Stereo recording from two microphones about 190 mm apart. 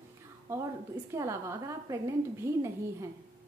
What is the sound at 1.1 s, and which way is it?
A woman's voice, 15° right (ahead or behind).